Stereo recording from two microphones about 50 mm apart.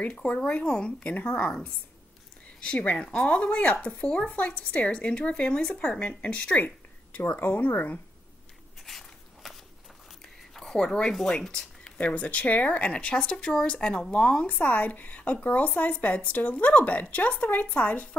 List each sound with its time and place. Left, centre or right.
0.0 s speech: left
2.6 s speech: left
8.8 s a sound: centre
10.5 s speech: centre
12.0 s speech: left
13.1 s speech: centre
14.6 s speech: left